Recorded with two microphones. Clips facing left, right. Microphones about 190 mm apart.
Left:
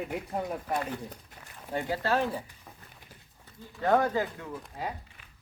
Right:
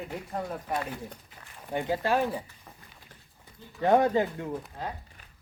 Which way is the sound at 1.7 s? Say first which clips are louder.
Right 2 dB; 20° right (ahead or behind).